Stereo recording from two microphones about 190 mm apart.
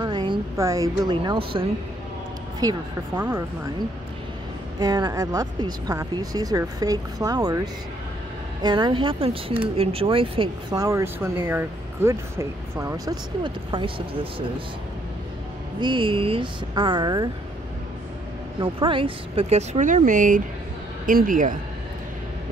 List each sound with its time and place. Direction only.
0.0 s speech: 25° right (ahead or behind)
4.7 s speech: 20° right (ahead or behind)
15.8 s speech: 25° right (ahead or behind)
18.6 s a man's voice: 25° right (ahead or behind); by 21.5 s 45° right (ahead or behind)